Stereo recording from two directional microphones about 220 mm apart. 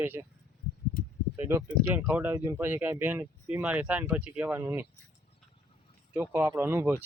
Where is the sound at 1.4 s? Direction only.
10° right (ahead or behind).